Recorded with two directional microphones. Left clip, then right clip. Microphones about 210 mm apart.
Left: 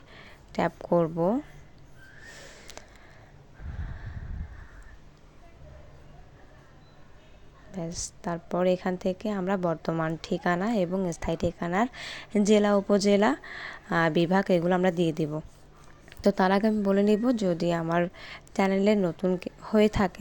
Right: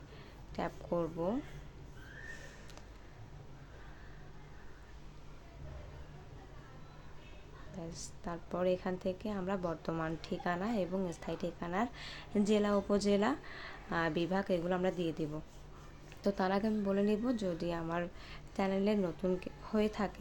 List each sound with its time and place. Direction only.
0.1 s speech: 35° left (ahead or behind)
2.3 s whistling: 30° left (ahead or behind)
7.7 s a woman's voice: 35° left (ahead or behind)